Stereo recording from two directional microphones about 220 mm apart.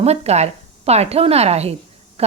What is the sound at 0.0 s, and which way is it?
A woman's voice, 30° right (ahead or behind).